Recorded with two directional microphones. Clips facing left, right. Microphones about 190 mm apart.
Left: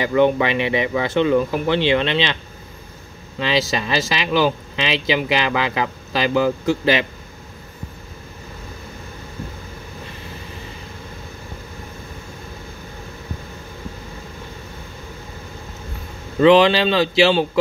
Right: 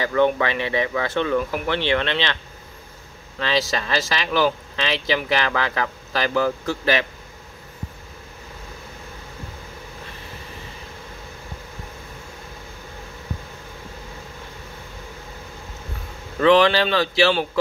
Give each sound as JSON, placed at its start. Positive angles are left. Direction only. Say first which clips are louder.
{"t": 0.0, "sound": "speech", "louder": "left 3 dB", "side_deg": 20}
{"t": 3.3, "sound": "speech", "louder": "left 2 dB", "side_deg": 15}
{"t": 16.3, "sound": "a man's voice", "louder": "left 3 dB", "side_deg": 20}